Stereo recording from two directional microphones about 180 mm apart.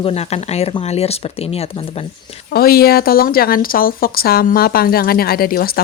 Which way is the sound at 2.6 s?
55° left (ahead or behind).